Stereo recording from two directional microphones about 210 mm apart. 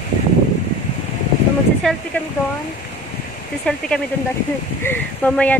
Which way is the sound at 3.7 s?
5° left (ahead or behind).